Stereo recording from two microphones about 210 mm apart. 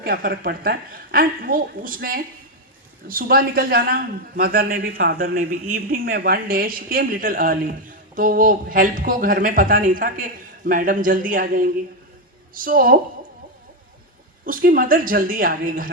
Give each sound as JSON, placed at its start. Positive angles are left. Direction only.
{"t": 0.0, "sound": "a man's voice", "side_deg": -45}
{"t": 14.4, "sound": "speech", "side_deg": -40}